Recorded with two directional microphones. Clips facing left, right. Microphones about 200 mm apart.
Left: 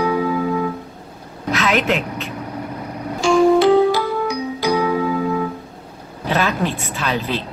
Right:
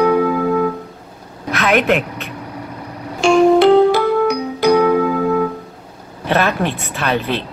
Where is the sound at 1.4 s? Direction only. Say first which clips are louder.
Right 3 dB; 55° right (ahead or behind).